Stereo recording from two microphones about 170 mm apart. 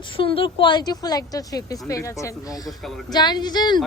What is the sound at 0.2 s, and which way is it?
A woman's voice, 30° left (ahead or behind).